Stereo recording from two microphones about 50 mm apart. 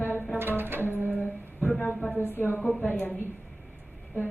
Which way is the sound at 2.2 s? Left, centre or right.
Left.